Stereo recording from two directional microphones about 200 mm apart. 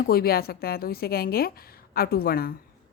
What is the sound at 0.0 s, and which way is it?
A woman's voice, 50° left (ahead or behind).